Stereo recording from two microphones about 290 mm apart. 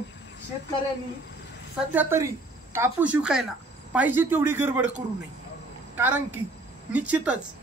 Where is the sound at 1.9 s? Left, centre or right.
Centre.